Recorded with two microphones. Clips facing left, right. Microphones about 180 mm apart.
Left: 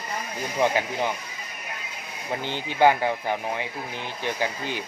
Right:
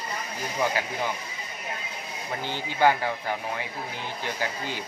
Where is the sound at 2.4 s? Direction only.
20° left (ahead or behind).